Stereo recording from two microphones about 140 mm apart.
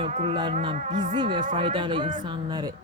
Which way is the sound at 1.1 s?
35° right (ahead or behind).